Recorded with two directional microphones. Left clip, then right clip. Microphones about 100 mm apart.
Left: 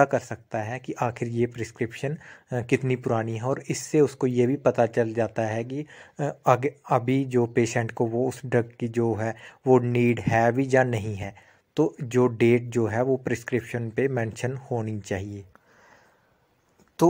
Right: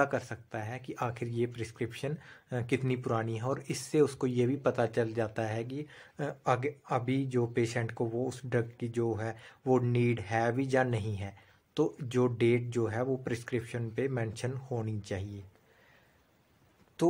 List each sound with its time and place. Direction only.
0.0 s speech: 40° left (ahead or behind)
6.4 s speech: 55° left (ahead or behind)
7.0 s speech: 45° left (ahead or behind)
17.0 s speech: 65° left (ahead or behind)